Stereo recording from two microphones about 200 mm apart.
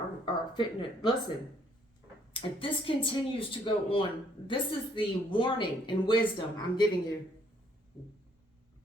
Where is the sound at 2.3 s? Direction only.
25° left (ahead or behind).